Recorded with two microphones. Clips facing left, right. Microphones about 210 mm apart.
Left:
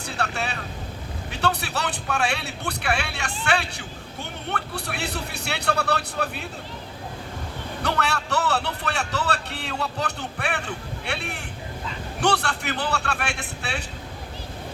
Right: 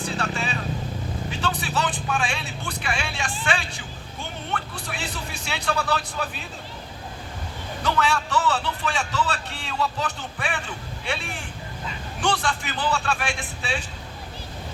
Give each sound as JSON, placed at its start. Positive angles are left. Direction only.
{"t": 0.0, "sound": "vehicle", "side_deg": 65}
{"t": 1.3, "sound": "a man's voice", "side_deg": 65}
{"t": 7.8, "sound": "a man's voice", "side_deg": 65}